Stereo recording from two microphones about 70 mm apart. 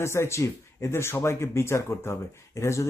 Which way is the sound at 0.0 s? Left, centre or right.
Left.